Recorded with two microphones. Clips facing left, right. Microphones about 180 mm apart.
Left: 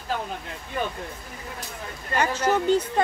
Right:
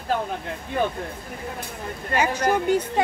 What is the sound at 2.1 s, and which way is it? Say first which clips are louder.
Speech: right 1 dB; 10° right (ahead or behind).